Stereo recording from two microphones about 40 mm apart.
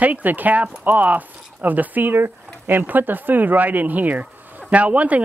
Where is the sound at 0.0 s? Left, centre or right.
Right.